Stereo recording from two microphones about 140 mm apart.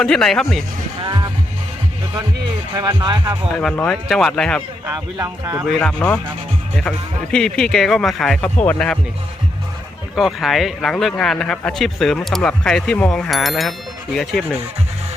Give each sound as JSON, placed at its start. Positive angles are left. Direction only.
{"t": 0.0, "sound": "speech", "side_deg": 5}
{"t": 1.0, "sound": "vehicle", "side_deg": -30}
{"t": 2.7, "sound": "speech", "side_deg": -30}
{"t": 3.6, "sound": "speech", "side_deg": 5}
{"t": 4.9, "sound": "speech", "side_deg": -25}
{"t": 5.6, "sound": "speech", "side_deg": 5}
{"t": 10.2, "sound": "speech", "side_deg": 0}